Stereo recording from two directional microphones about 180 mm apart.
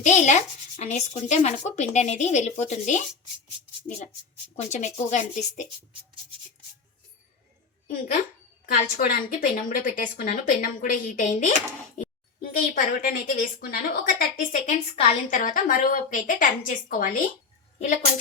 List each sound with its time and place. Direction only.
0.0 s speech: 40° left (ahead or behind)
4.5 s speech: 40° left (ahead or behind)
8.6 s a woman's voice: 50° left (ahead or behind)
11.9 s a woman's voice: 55° left (ahead or behind)